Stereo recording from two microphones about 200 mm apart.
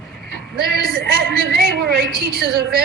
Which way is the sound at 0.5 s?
50° right (ahead or behind).